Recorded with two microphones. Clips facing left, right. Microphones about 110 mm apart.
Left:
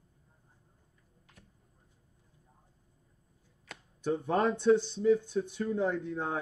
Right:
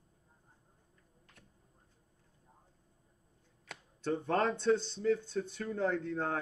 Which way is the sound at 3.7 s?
Centre (ahead or behind).